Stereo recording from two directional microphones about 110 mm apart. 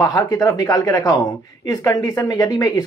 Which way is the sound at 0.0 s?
30° left (ahead or behind).